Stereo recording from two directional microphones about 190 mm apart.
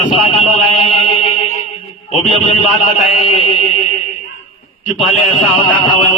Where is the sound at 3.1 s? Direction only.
30° left (ahead or behind).